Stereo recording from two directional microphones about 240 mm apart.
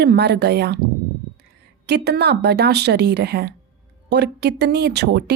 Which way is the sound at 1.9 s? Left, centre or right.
Right.